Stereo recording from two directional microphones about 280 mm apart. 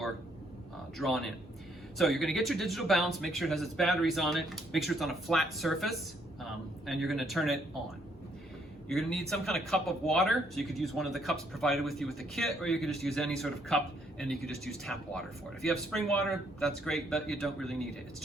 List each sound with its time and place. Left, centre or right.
0.9 s speech: centre
8.9 s speech: centre